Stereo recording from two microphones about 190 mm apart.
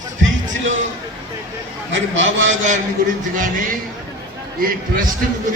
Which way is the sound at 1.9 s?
80° right.